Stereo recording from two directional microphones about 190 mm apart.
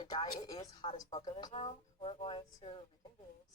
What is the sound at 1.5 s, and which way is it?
Speech, 30° left (ahead or behind).